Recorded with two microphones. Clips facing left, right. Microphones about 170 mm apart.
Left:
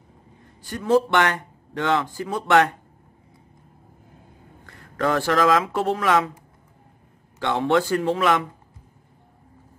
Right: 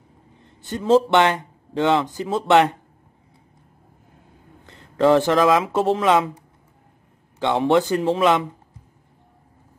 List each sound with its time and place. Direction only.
0.6 s speech: 25° right (ahead or behind)
4.6 s speech: 20° right (ahead or behind)
7.3 s speech: 20° right (ahead or behind)